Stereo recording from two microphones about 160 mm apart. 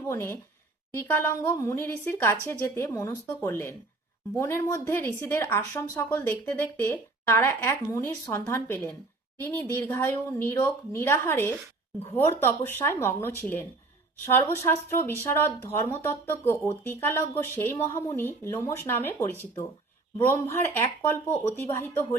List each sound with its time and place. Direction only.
0.1 s speech: 15° left (ahead or behind)